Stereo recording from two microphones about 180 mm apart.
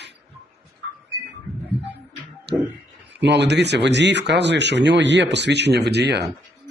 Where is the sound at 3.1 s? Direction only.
70° right (ahead or behind).